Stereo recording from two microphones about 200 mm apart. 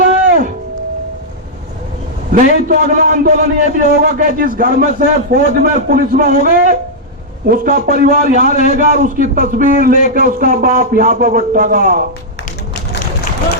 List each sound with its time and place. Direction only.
2.3 s a man's voice: 40° right (ahead or behind)